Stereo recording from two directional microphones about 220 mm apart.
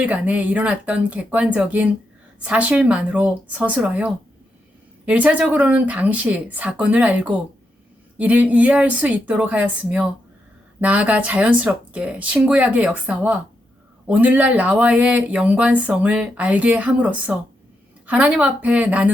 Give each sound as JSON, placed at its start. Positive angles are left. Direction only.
{"t": 0.0, "sound": "speech", "side_deg": -5}